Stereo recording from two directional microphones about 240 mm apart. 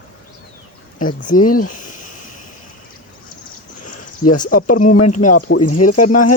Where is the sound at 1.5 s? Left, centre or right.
Left.